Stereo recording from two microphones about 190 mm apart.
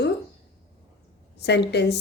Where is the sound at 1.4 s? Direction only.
60° left (ahead or behind).